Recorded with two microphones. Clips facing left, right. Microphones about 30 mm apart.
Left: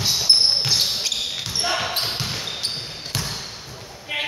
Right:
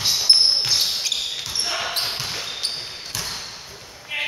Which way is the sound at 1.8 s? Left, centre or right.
Centre.